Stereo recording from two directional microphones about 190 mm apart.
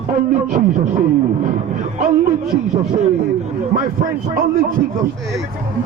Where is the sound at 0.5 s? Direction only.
45° right (ahead or behind).